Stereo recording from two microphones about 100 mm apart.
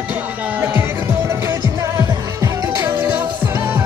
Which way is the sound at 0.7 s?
25° right (ahead or behind).